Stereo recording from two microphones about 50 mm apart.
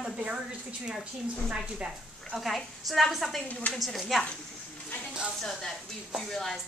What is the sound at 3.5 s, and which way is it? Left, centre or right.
Speech, left.